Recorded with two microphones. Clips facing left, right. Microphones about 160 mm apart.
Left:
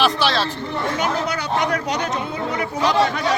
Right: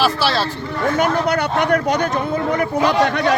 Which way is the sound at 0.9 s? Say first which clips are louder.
Right 8 dB; 55° right (ahead or behind).